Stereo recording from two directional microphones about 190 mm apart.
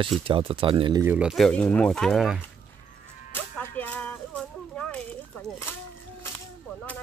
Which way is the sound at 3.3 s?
10° left (ahead or behind).